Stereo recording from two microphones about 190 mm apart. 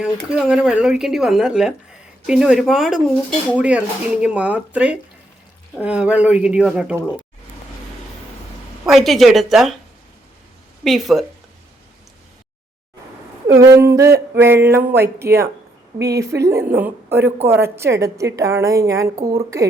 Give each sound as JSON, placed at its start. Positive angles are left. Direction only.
{"t": 0.0, "sound": "a woman's voice", "side_deg": -5}
{"t": 8.9, "sound": "speech", "side_deg": 0}
{"t": 10.8, "sound": "speech", "side_deg": 0}
{"t": 13.6, "sound": "a woman's voice", "side_deg": -15}